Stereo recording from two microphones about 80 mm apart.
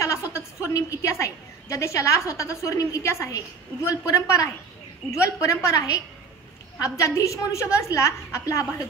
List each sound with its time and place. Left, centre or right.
0.0 s a woman's voice: left